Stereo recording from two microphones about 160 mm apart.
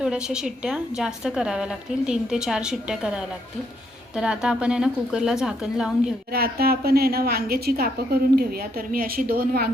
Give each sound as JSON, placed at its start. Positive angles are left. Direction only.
{"t": 0.0, "sound": "a woman's voice", "side_deg": -5}
{"t": 6.3, "sound": "a woman's voice", "side_deg": -75}